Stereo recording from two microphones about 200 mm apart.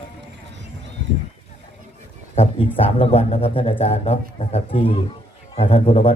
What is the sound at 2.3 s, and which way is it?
A man's voice, 30° left (ahead or behind).